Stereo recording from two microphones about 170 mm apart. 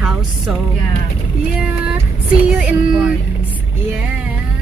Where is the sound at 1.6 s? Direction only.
5° right (ahead or behind).